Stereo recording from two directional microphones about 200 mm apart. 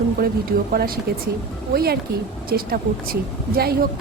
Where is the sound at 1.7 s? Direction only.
50° right (ahead or behind).